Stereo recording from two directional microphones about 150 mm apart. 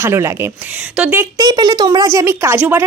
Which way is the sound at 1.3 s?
25° right (ahead or behind).